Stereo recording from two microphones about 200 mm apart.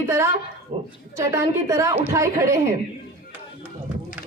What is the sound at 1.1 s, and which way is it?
Speech, 15° right (ahead or behind).